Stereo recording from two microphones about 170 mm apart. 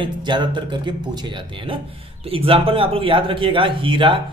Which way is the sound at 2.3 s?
35° right (ahead or behind).